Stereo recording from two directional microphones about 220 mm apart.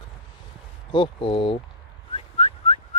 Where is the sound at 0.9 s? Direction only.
25° left (ahead or behind).